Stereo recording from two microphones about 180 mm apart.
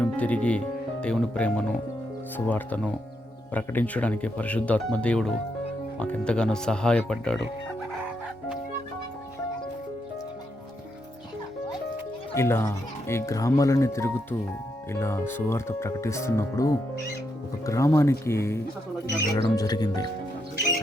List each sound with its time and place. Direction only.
0.0 s speech: 10° left (ahead or behind)
12.3 s speech: 15° left (ahead or behind)